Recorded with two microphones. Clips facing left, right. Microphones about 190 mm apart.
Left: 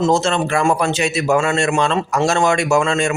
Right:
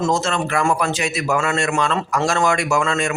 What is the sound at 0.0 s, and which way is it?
A man's voice, 25° left (ahead or behind).